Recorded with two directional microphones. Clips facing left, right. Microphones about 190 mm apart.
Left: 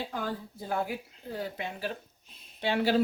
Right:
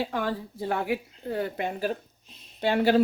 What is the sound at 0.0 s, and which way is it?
Speech, 75° right (ahead or behind).